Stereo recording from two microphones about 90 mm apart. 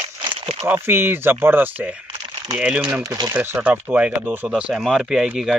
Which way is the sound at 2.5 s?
15° right (ahead or behind).